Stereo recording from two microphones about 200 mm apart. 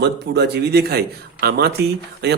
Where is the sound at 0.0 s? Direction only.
55° right (ahead or behind).